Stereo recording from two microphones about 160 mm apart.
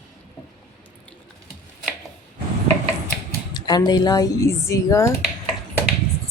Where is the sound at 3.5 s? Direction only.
25° left (ahead or behind).